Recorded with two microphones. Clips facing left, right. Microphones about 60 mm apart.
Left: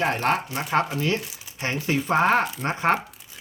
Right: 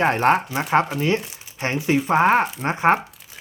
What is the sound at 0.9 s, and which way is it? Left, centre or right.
Speech, right.